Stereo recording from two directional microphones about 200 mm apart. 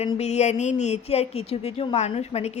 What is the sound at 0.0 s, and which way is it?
Speech, 30° left (ahead or behind).